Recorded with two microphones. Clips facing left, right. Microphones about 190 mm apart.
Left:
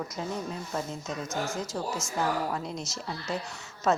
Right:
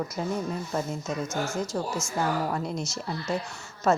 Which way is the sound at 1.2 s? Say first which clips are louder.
Right 3 dB; 15° left (ahead or behind).